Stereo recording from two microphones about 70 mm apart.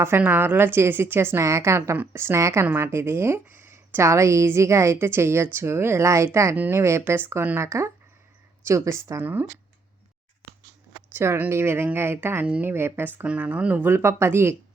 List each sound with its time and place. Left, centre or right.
0.2 s a woman's voice: right
4.0 s a woman's voice: right
9.2 s speech: right
11.1 s a sound: right
11.4 s a woman's voice: right
13.2 s a woman's voice: centre; by 14.5 s right